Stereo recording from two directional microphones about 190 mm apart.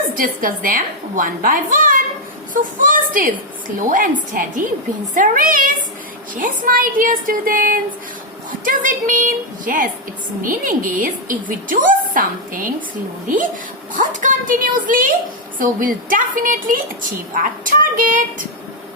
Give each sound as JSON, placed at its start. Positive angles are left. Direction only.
{"t": 0.2, "sound": "a woman's voice", "side_deg": -50}
{"t": 13.9, "sound": "a woman's voice", "side_deg": -40}